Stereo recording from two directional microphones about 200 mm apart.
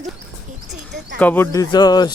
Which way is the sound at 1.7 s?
20° left (ahead or behind).